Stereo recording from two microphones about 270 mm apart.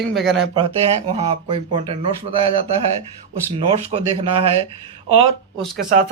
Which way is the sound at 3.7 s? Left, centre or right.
Right.